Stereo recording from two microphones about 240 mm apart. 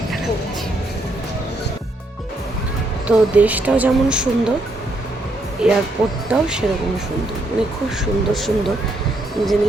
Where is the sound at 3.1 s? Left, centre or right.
Centre.